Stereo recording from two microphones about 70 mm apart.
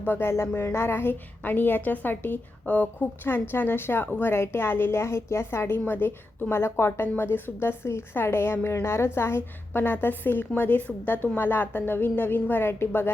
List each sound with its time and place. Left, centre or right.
0.0 s a woman's voice: left